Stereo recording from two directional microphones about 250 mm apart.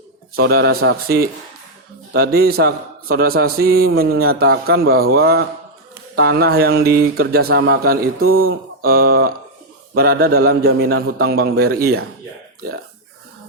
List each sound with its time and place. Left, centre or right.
0.4 s speech: right
8.2 s speech: right
8.8 s speech: right